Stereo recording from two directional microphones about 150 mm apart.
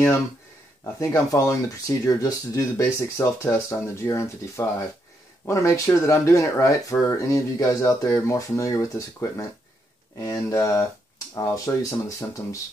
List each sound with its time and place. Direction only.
0.9 s speech: 20° left (ahead or behind)